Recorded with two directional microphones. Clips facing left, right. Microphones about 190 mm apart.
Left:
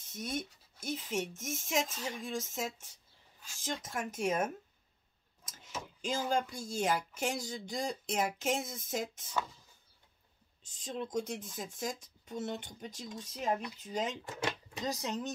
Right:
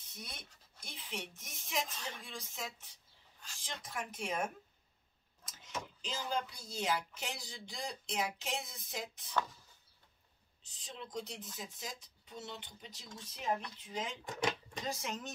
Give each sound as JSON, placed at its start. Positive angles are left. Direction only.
{"t": 0.0, "sound": "speech", "side_deg": 45}
{"t": 1.9, "sound": "speech", "side_deg": 10}
{"t": 2.2, "sound": "speech", "side_deg": 45}
{"t": 6.0, "sound": "speech", "side_deg": 50}
{"t": 9.3, "sound": "speech", "side_deg": 10}
{"t": 10.6, "sound": "speech", "side_deg": 45}
{"t": 14.2, "sound": "speech", "side_deg": 5}
{"t": 14.9, "sound": "speech", "side_deg": 40}